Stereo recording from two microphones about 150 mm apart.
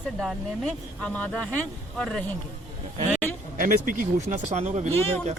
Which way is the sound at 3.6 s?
65° right (ahead or behind).